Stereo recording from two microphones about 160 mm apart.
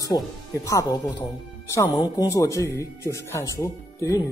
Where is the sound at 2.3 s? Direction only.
20° left (ahead or behind).